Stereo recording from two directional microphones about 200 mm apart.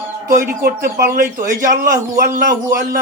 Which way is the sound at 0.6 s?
45° right (ahead or behind).